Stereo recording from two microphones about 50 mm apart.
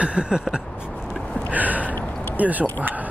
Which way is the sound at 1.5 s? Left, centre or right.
Right.